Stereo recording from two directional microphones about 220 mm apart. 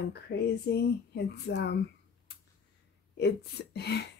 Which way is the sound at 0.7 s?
50° left (ahead or behind).